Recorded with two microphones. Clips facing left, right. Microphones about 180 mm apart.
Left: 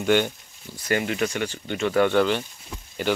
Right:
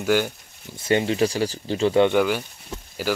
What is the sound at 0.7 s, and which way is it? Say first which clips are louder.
Speech: right 4 dB; 25° right (ahead or behind).